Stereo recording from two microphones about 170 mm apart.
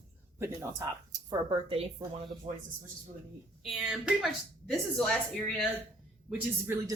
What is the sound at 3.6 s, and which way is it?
A woman's voice, centre (ahead or behind).